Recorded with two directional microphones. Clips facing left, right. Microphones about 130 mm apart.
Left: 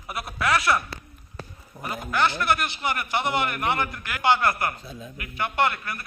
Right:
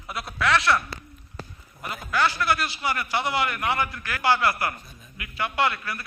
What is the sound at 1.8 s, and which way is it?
A man's voice, 25° left (ahead or behind).